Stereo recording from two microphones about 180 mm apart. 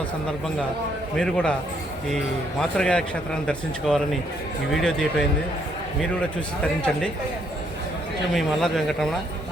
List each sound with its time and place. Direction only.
1.1 s a man's voice: 5° left (ahead or behind)
2.6 s a man's voice: 5° left (ahead or behind)
8.4 s a man's voice: centre (ahead or behind)